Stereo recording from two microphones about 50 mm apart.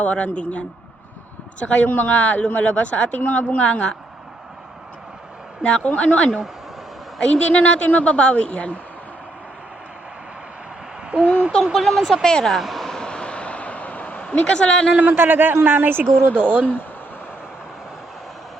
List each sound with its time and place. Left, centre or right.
0.0 s a woman's voice: left
1.5 s a woman's voice: left
1.9 s speech: left
3.6 s a woman's voice: left
5.6 s a woman's voice: left
11.1 s speech: right
11.6 s speech: centre
12.5 s a sound: centre; by 14.3 s left
14.4 s speech: centre
14.9 s a man's voice: right